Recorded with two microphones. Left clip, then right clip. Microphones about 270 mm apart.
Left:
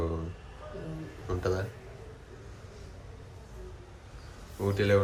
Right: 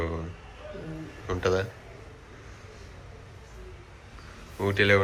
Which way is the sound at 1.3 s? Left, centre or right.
Centre.